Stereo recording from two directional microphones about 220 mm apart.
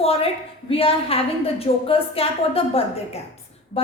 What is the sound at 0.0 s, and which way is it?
A woman's voice, 25° left (ahead or behind).